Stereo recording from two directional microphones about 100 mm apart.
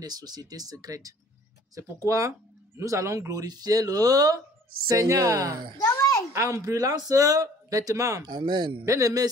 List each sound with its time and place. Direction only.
0.0 s a man's voice: 40° right (ahead or behind)
5.8 s a sound: 30° left (ahead or behind)
6.3 s a man's voice: 30° right (ahead or behind)
8.3 s speech: 50° right (ahead or behind)
8.8 s a man's voice: 35° right (ahead or behind)